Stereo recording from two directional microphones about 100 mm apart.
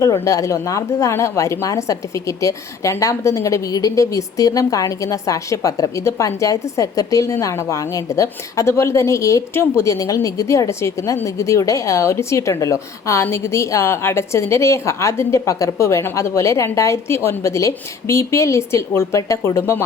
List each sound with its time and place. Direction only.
0.0 s a woman's voice: 30° left (ahead or behind)